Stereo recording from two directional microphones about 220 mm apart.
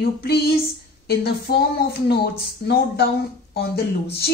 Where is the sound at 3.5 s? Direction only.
45° left (ahead or behind).